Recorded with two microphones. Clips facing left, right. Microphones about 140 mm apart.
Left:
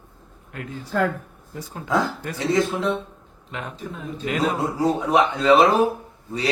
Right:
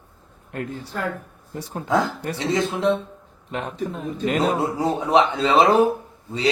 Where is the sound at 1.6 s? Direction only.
25° right (ahead or behind).